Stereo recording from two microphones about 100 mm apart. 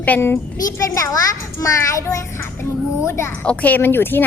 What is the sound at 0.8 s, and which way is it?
A child's voice, 35° left (ahead or behind).